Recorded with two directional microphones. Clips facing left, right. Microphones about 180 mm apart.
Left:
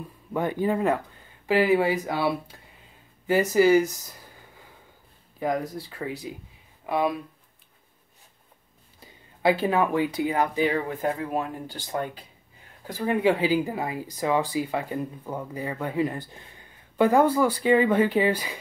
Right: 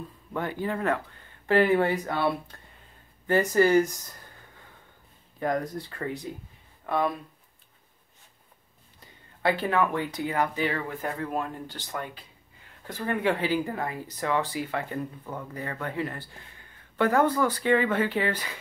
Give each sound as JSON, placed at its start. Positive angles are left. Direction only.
{"t": 0.0, "sound": "speech", "side_deg": 15}
{"t": 9.4, "sound": "speech", "side_deg": 10}